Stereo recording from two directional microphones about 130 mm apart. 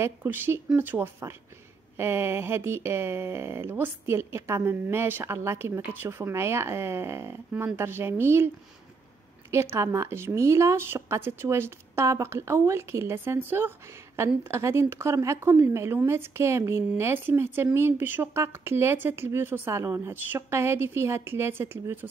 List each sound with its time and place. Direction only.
0.0 s speech: 20° right (ahead or behind)
9.5 s speech: 20° right (ahead or behind)